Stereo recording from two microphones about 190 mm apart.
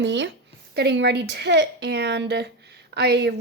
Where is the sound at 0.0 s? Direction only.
70° right (ahead or behind).